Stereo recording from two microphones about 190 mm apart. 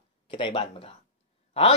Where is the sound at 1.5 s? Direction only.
35° left (ahead or behind).